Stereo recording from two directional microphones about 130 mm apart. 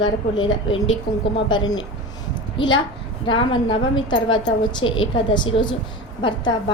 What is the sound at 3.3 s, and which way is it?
A woman's voice, 40° left (ahead or behind).